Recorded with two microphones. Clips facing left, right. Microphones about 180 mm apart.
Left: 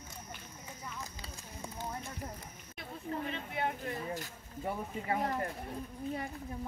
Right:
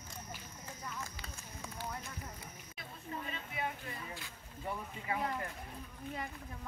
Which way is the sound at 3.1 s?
55° left (ahead or behind).